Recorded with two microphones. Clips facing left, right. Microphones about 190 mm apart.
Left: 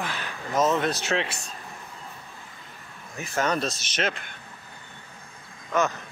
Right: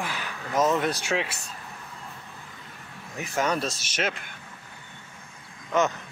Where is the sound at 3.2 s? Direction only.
10° right (ahead or behind).